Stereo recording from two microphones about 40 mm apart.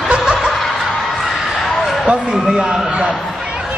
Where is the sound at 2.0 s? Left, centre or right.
Right.